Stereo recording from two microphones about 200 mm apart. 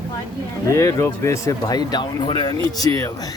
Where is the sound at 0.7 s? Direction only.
15° left (ahead or behind).